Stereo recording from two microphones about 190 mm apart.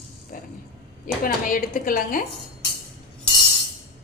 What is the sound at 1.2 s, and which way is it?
Speech, 45° left (ahead or behind).